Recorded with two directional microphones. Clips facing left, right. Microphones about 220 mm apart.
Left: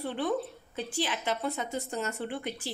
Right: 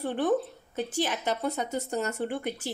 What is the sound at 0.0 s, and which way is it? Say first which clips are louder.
A woman's voice: right 4 dB; 50° right (ahead or behind).